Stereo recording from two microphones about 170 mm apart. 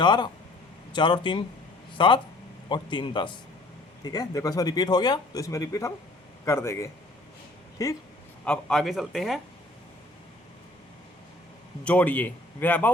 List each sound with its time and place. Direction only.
0.0 s a man's voice: 25° left (ahead or behind)
8.4 s speech: centre (ahead or behind)
11.9 s a man's voice: 10° left (ahead or behind)